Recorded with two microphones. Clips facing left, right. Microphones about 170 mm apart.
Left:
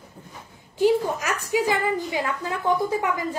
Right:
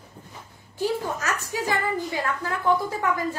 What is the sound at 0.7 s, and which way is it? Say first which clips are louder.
A woman's voice: left 6 dB; 15° left (ahead or behind).